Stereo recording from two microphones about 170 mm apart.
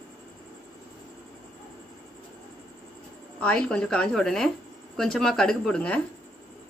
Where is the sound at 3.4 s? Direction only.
5° left (ahead or behind).